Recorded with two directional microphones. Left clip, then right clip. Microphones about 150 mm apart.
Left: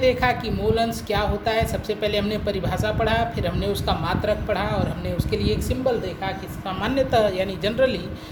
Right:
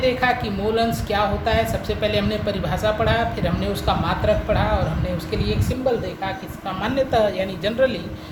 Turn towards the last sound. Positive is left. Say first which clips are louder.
# right 1 dB
turn(degrees=50)  # may be behind; listen again after turning